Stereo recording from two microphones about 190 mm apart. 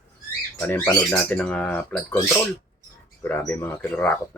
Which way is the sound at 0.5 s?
10° left (ahead or behind).